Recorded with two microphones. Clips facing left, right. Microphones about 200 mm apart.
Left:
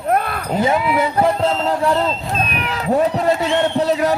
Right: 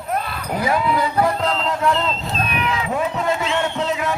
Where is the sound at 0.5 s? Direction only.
25° left (ahead or behind).